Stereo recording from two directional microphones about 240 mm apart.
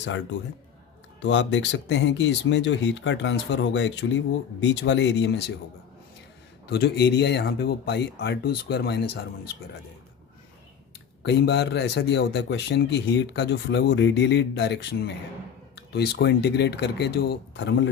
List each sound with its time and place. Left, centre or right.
0.0 s a man's voice: left
6.7 s a man's voice: left
11.2 s a man's voice: left